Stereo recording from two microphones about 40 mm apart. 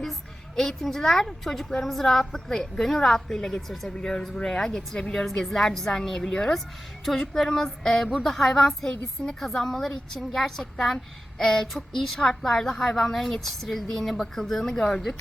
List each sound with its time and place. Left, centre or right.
0.0 s a woman's voice: centre